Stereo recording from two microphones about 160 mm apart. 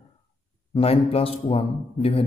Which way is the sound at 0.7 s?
35° left (ahead or behind).